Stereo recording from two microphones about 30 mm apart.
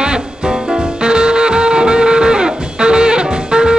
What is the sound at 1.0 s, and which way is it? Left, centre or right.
Music, right.